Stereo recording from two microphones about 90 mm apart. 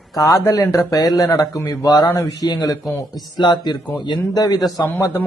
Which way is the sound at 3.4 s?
55° left (ahead or behind).